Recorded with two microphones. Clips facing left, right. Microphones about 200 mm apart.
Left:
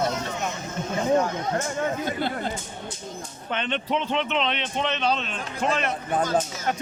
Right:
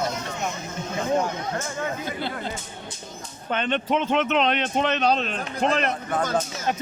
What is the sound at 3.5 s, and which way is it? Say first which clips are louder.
Speech: right 3 dB; 45° right (ahead or behind).